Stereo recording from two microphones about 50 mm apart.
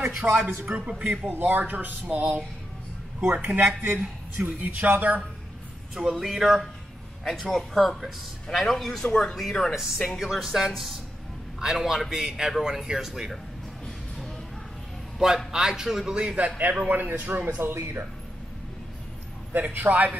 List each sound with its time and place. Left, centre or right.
0.2 s speech: right
1.3 s speech: right
3.2 s speech: centre
4.4 s speech: right
6.1 s a man's voice: centre
9.8 s a man's voice: centre
15.1 s a man's voice: centre
16.2 s speech: centre
16.4 s speech: right
19.5 s speech: right